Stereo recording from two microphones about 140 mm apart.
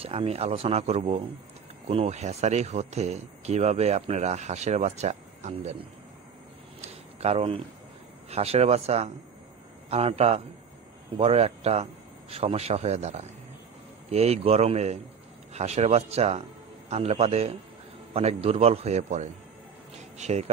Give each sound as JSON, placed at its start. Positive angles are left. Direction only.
{"t": 0.0, "sound": "speech", "side_deg": -45}
{"t": 6.8, "sound": "a sound", "side_deg": -50}
{"t": 8.3, "sound": "speech", "side_deg": -50}